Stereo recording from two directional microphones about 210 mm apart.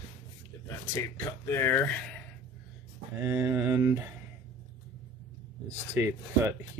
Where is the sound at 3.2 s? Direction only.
15° right (ahead or behind).